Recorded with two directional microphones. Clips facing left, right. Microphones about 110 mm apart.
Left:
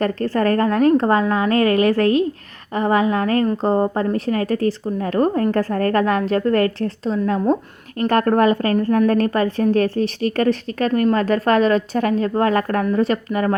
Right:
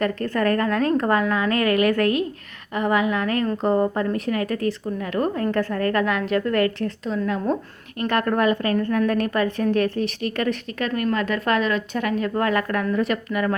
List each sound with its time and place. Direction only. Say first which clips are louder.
0.0 s a woman's voice: left 3 dB; 35° left (ahead or behind)
8.0 s speech: left 5 dB; 40° left (ahead or behind)